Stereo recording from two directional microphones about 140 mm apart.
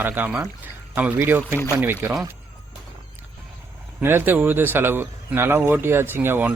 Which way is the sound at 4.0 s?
15° right (ahead or behind).